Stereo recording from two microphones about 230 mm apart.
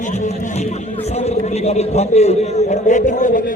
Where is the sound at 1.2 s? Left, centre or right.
Left.